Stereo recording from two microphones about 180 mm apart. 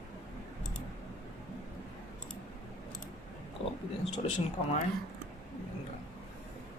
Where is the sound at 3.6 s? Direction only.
30° left (ahead or behind).